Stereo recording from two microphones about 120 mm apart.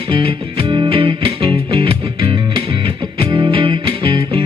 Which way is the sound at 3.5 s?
50° right (ahead or behind).